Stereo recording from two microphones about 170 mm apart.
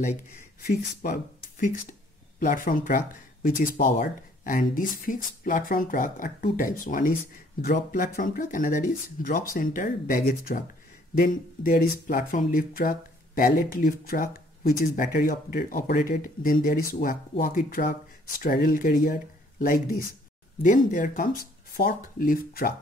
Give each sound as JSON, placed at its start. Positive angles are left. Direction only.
{"t": 0.0, "sound": "speech", "side_deg": 45}